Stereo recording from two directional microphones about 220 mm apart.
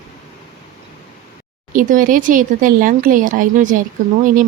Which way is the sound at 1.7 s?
35° right (ahead or behind).